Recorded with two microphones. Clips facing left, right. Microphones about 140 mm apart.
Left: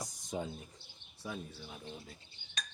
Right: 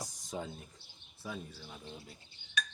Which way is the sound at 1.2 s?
15° left (ahead or behind).